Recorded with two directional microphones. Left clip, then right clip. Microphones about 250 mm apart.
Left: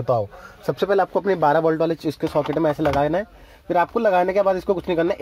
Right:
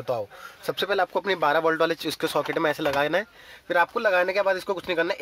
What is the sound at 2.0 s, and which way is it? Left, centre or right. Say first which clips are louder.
Speech: left 3 dB; right.